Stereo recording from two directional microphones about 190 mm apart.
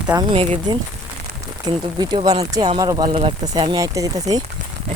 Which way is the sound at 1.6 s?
20° right (ahead or behind).